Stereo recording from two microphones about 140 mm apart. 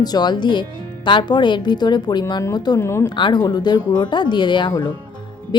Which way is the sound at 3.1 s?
35° left (ahead or behind).